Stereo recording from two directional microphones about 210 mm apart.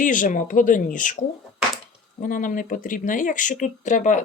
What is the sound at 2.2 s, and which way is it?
Speech, 40° left (ahead or behind).